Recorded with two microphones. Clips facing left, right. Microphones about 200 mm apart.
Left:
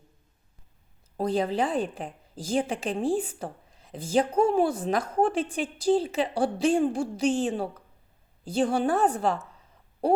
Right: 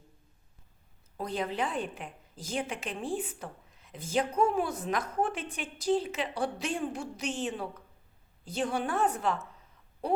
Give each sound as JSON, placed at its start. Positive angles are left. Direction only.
{"t": 1.2, "sound": "a woman's voice", "side_deg": 30}